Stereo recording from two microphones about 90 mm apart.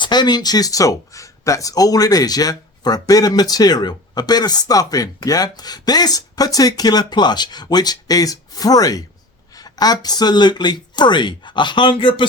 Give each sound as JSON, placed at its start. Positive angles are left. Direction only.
{"t": 0.0, "sound": "speech", "side_deg": 55}